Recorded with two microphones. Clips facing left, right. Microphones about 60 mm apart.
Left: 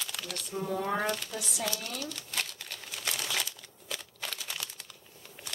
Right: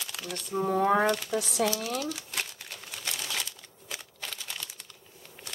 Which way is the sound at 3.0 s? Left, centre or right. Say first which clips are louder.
Left 1 dB; centre.